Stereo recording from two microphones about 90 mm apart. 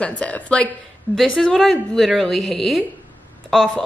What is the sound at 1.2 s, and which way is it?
A woman's voice, 5° left (ahead or behind).